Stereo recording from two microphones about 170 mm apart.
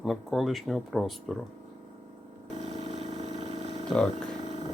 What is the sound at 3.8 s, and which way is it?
Speech, 5° left (ahead or behind).